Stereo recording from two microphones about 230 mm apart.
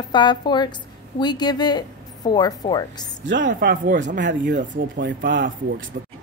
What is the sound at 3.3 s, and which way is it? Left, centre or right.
Speech, right.